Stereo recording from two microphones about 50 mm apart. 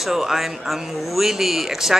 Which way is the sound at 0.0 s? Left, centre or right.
Centre.